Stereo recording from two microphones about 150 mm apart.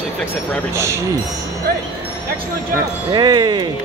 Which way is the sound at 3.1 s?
30° right (ahead or behind).